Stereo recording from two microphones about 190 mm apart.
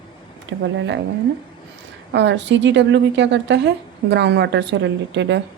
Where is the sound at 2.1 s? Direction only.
70° right (ahead or behind).